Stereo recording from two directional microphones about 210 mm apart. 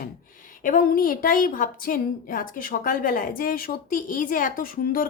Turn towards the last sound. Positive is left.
turn(degrees=45)  # may be behind; listen again after turning